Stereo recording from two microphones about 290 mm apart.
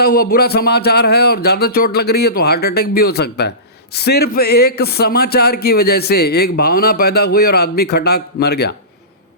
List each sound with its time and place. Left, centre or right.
0.0 s speech: left